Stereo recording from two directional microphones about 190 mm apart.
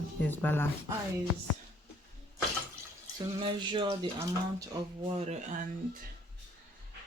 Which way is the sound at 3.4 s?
25° right (ahead or behind).